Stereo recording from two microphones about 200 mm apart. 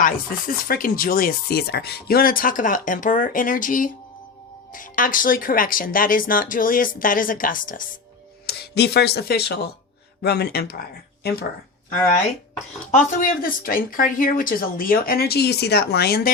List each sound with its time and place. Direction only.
0.0 s speech: 45° left (ahead or behind)
8.4 s speech: 55° left (ahead or behind)
13.1 s speech: 45° left (ahead or behind)